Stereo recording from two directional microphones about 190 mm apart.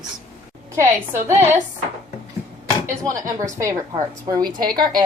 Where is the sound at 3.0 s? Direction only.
15° right (ahead or behind).